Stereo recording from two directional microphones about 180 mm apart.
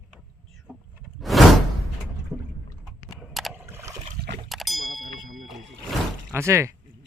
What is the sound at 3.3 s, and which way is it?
Rowboat, 5° right (ahead or behind).